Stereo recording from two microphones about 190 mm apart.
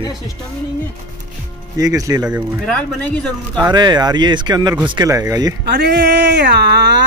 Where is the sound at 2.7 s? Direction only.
10° left (ahead or behind).